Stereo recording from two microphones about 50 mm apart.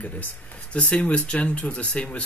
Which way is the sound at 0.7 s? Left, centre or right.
Left.